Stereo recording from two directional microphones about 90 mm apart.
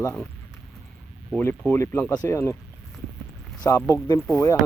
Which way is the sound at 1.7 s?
30° left (ahead or behind).